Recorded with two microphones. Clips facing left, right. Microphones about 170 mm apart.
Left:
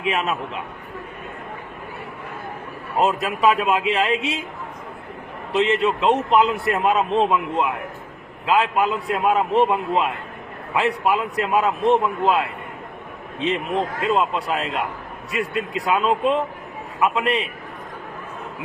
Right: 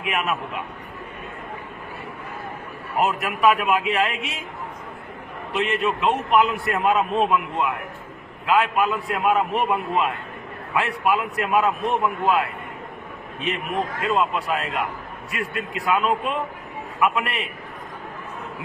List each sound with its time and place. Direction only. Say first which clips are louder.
0.0 s a man's voice: left 2 dB; 25° left (ahead or behind)
3.0 s a man's voice: left 1 dB; 25° left (ahead or behind)
5.5 s a man's voice: left 4 dB; 25° left (ahead or behind)
14.0 s a man's voice: even; 25° left (ahead or behind)